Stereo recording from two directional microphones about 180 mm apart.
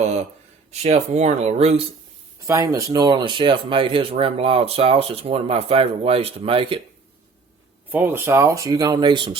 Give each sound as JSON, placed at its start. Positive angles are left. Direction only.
{"t": 0.7, "sound": "speech", "side_deg": -35}
{"t": 2.5, "sound": "speech", "side_deg": -15}
{"t": 7.9, "sound": "speech", "side_deg": -10}